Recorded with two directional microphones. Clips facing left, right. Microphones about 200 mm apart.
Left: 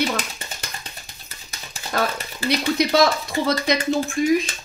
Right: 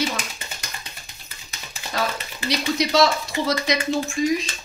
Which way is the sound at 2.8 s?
55° left (ahead or behind).